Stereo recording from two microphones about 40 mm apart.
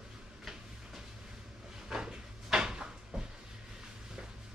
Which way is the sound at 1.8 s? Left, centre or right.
Centre.